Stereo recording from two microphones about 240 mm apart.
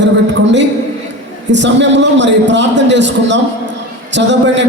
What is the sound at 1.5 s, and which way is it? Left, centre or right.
A man's voice, right.